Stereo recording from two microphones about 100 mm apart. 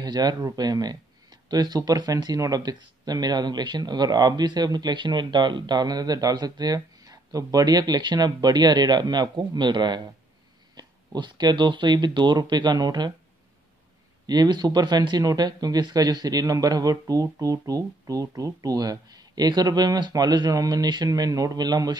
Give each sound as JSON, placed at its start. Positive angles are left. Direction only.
{"t": 0.0, "sound": "speech", "side_deg": -45}
{"t": 14.2, "sound": "speech", "side_deg": -40}